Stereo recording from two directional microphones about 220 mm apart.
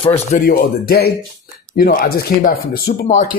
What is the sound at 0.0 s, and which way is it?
Speech, 25° left (ahead or behind).